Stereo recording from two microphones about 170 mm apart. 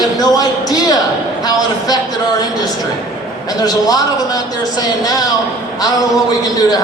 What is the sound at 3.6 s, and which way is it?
A man's voice, 20° left (ahead or behind).